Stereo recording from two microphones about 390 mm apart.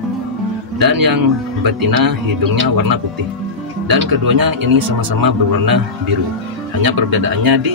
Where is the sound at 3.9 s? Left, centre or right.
Right.